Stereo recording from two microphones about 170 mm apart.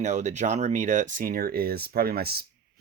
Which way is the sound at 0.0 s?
45° right (ahead or behind).